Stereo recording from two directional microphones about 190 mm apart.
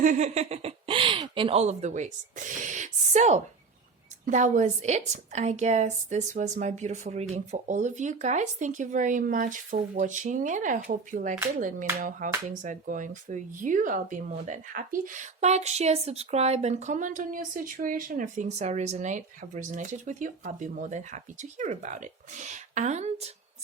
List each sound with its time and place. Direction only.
0.0 s speech: 40° right (ahead or behind)
11.9 s a sound: 40° right (ahead or behind)
12.5 s speech: 40° right (ahead or behind)